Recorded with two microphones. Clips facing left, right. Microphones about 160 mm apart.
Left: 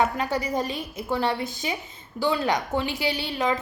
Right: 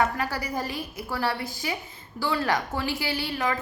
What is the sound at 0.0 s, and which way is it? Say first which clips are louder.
A woman's voice: left 2 dB; 20° left (ahead or behind).